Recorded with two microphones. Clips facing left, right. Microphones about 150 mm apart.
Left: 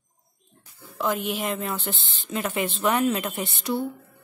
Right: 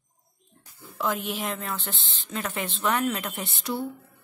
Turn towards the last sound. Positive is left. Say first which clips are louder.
# left 4 dB
turn(degrees=0)  # may be behind; listen again after turning